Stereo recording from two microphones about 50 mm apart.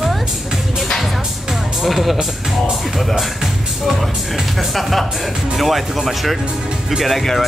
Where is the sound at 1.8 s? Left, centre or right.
Centre.